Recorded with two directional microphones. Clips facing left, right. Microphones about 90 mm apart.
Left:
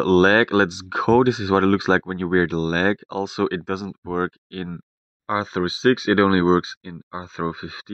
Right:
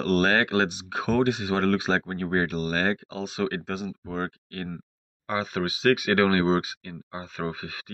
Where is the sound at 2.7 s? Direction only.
80° left.